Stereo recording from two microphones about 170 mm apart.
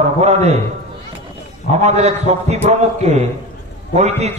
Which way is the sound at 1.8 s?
40° right (ahead or behind).